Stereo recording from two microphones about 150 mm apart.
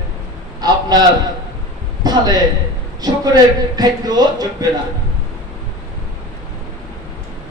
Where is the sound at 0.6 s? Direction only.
25° right (ahead or behind).